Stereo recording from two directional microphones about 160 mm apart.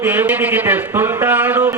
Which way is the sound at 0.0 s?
10° right (ahead or behind).